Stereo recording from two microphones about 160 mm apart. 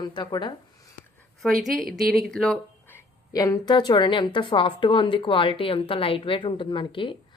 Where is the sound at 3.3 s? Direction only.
20° left (ahead or behind).